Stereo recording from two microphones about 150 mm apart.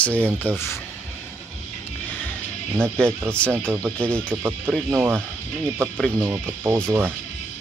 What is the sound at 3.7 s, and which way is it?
Speech, 15° right (ahead or behind).